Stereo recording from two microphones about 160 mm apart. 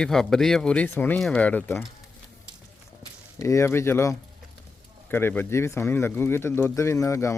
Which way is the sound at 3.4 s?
20° left (ahead or behind).